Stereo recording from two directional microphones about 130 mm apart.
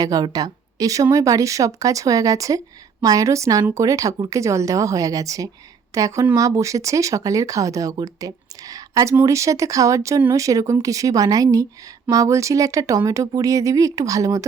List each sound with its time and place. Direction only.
0.0 s speech: 30° right (ahead or behind)